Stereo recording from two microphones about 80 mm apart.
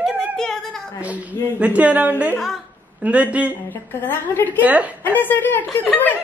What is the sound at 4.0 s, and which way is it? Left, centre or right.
Speech, left.